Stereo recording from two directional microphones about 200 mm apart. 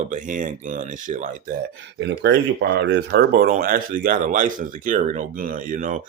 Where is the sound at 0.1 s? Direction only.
40° right (ahead or behind).